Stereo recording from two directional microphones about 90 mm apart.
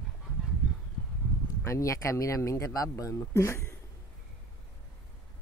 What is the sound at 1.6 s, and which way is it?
Speech, 35° left (ahead or behind).